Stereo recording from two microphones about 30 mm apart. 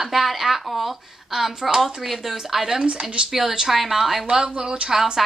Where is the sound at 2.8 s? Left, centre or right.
Right.